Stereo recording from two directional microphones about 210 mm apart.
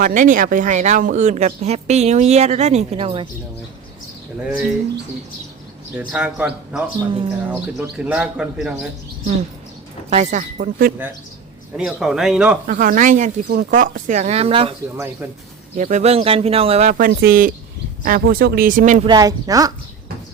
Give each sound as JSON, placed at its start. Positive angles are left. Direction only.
{"t": 0.0, "sound": "speech", "side_deg": -40}
{"t": 6.0, "sound": "a man's voice", "side_deg": -5}
{"t": 7.1, "sound": "speech", "side_deg": -20}
{"t": 7.9, "sound": "a man's voice", "side_deg": -5}
{"t": 10.1, "sound": "speech", "side_deg": -35}
{"t": 11.8, "sound": "a man's voice", "side_deg": -5}
{"t": 12.6, "sound": "speech", "side_deg": -40}
{"t": 14.9, "sound": "speech", "side_deg": -10}
{"t": 15.8, "sound": "speech", "side_deg": -35}
{"t": 16.9, "sound": "speech", "side_deg": -45}
{"t": 19.0, "sound": "speech", "side_deg": -20}